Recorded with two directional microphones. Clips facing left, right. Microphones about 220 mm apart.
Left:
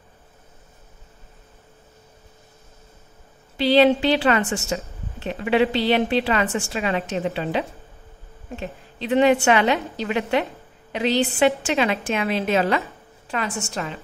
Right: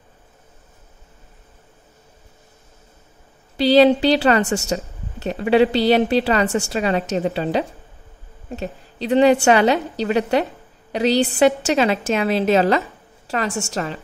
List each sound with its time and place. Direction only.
3.5 s a woman's voice: 35° right (ahead or behind)